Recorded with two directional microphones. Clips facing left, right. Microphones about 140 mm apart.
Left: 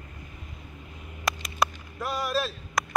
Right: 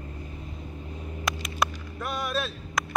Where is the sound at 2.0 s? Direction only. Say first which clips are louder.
Left 2 dB; centre (ahead or behind).